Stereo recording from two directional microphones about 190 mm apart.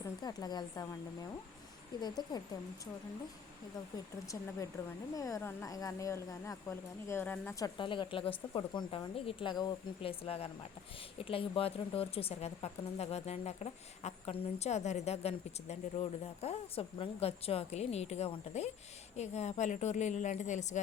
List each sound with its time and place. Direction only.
0.0 s speech: 20° left (ahead or behind)
2.0 s speech: 20° left (ahead or behind)
3.9 s speech: 15° left (ahead or behind)
7.8 s speech: 25° left (ahead or behind)